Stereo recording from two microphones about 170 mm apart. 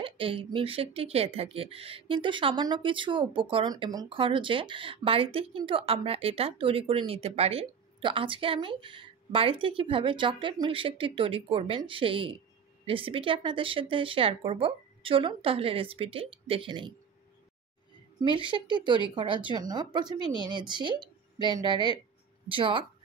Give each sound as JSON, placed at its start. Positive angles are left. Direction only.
{"t": 0.0, "sound": "speech", "side_deg": -30}
{"t": 18.2, "sound": "speech", "side_deg": -30}